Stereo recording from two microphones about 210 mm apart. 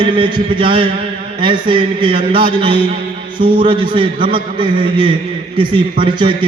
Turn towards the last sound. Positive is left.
turn(degrees=-25)  # may be behind; listen again after turning